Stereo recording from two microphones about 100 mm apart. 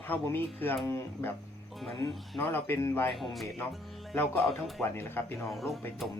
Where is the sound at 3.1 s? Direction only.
Centre (ahead or behind).